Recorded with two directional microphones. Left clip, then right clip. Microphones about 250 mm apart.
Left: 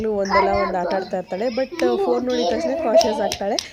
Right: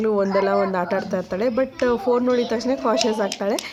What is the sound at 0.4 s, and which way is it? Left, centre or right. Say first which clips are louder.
A woman's voice: left 1 dB; centre.